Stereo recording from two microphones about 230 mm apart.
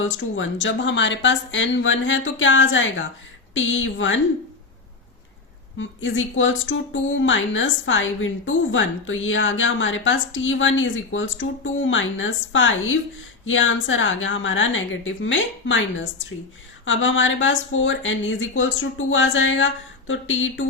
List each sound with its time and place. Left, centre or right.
0.0 s speech: left
5.7 s speech: left